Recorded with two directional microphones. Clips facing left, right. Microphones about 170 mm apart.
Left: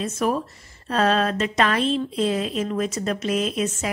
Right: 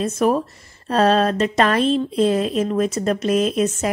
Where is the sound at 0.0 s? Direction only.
40° right (ahead or behind).